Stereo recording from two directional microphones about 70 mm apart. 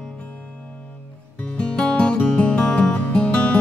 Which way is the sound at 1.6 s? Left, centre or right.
Centre.